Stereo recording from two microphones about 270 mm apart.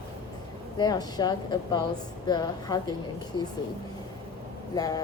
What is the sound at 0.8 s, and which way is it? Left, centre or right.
Speech, centre.